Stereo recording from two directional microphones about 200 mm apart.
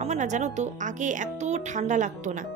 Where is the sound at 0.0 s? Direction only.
35° right (ahead or behind).